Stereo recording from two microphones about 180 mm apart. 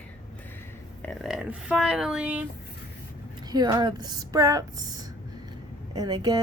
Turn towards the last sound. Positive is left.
turn(degrees=-20)  # may be behind; listen again after turning